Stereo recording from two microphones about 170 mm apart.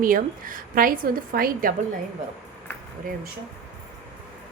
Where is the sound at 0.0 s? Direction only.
55° right (ahead or behind).